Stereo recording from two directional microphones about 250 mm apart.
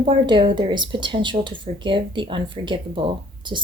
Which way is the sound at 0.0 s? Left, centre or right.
Centre.